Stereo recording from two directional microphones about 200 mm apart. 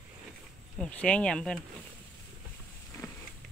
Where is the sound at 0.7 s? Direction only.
5° left (ahead or behind).